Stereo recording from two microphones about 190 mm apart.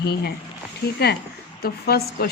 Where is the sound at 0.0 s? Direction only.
55° left (ahead or behind).